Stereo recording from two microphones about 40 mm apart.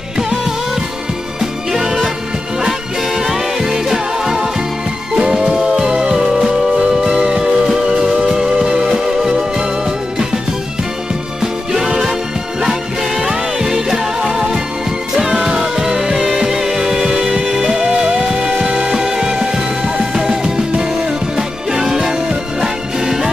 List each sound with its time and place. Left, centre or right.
1.4 s music: centre
3.2 s music: centre
11.7 s music: centre
13.2 s music: centre